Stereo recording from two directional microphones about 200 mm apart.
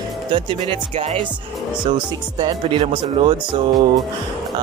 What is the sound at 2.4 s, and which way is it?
Speech, 25° right (ahead or behind).